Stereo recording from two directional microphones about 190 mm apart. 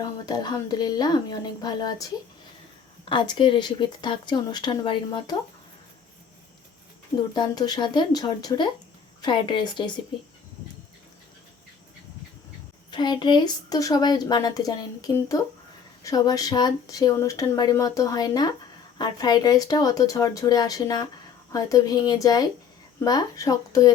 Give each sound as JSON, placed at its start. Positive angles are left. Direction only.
{"t": 0.0, "sound": "speech", "side_deg": 20}
{"t": 3.1, "sound": "speech", "side_deg": 25}
{"t": 7.2, "sound": "speech", "side_deg": 25}
{"t": 12.9, "sound": "speech", "side_deg": 25}